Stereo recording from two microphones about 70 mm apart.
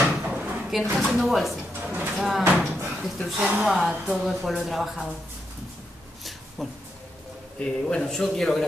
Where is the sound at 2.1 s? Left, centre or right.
Centre.